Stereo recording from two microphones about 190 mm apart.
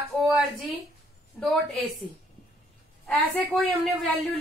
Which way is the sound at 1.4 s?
5° left (ahead or behind).